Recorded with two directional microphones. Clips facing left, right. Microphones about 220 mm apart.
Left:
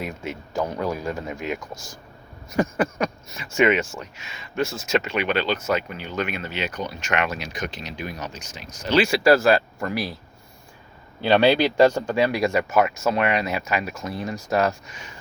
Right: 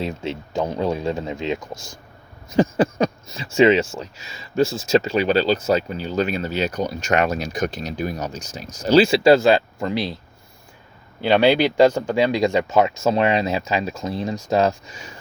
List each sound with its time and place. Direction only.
0.0 s speech: 25° right (ahead or behind)
11.2 s speech: 15° right (ahead or behind)